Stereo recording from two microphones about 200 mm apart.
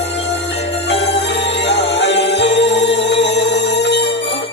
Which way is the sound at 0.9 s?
60° left (ahead or behind).